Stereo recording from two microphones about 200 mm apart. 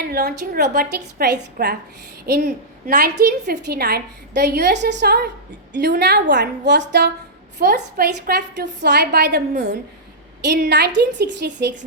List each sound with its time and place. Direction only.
0.0 s a woman's voice: 50° right (ahead or behind)
10.4 s a woman's voice: 60° right (ahead or behind)